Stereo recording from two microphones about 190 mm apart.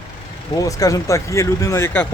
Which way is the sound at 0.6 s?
20° left (ahead or behind).